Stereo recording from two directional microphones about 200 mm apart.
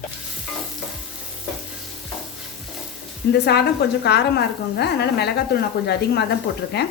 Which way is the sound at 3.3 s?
55° left (ahead or behind).